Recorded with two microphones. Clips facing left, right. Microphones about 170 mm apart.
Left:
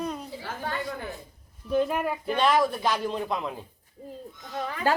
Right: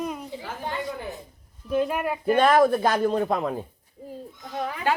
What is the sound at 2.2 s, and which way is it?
Speech, 50° right (ahead or behind).